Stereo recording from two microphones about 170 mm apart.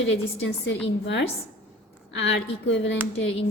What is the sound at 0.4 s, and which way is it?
A woman's voice, 90° left.